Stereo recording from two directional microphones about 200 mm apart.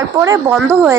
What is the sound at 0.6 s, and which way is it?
Speech, centre (ahead or behind).